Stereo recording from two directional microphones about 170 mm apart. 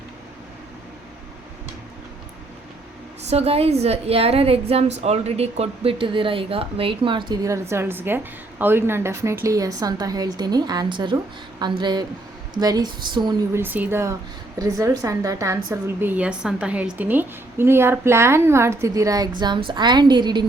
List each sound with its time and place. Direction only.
3.2 s a woman's voice: 35° right (ahead or behind)
13.5 s a woman's voice: 10° right (ahead or behind)